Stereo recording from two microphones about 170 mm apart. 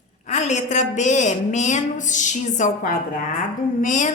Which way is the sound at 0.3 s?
45° left (ahead or behind).